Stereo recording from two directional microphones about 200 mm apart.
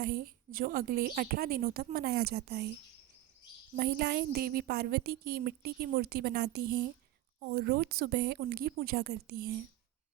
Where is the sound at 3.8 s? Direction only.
50° right (ahead or behind).